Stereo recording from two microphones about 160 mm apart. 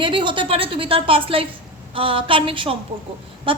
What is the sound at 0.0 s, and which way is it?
A woman's voice, 30° right (ahead or behind).